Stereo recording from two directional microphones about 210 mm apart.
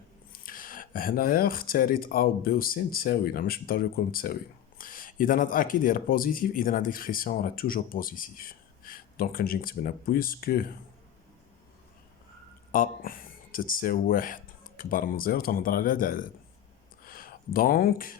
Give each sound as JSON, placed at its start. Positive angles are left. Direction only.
{"t": 0.3, "sound": "speech", "side_deg": 40}
{"t": 12.7, "sound": "speech", "side_deg": 40}
{"t": 17.0, "sound": "a sound", "side_deg": 45}